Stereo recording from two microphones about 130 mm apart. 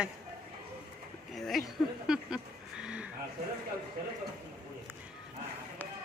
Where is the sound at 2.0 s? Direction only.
5° right (ahead or behind).